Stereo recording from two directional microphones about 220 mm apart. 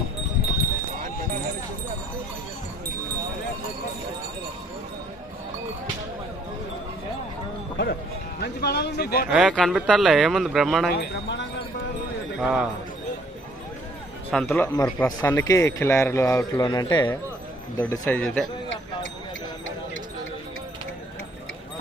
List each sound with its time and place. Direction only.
8.4 s a sound: 45° left (ahead or behind)
9.3 s a man's voice: 5° right (ahead or behind)
10.8 s speech: 45° left (ahead or behind)
12.4 s speech: 5° right (ahead or behind)
14.3 s speech: 10° left (ahead or behind)